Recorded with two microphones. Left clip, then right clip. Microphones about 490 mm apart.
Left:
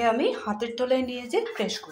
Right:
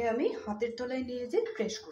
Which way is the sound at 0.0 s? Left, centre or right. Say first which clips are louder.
Left 7 dB; right.